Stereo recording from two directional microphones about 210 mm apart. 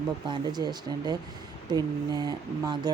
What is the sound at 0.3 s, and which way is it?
Speech, 20° right (ahead or behind).